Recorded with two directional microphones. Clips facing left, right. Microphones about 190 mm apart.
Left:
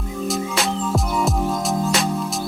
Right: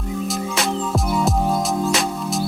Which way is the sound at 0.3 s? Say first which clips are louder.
Left 2 dB; centre (ahead or behind).